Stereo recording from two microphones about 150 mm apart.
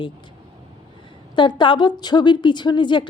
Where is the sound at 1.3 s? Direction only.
30° left (ahead or behind).